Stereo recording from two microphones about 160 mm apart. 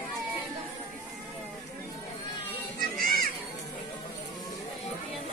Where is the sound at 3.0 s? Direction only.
65° right (ahead or behind).